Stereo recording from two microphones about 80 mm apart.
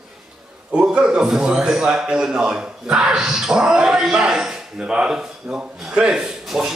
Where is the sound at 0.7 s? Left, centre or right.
Centre.